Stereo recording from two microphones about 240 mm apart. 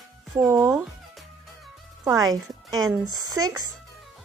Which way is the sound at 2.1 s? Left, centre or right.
Centre.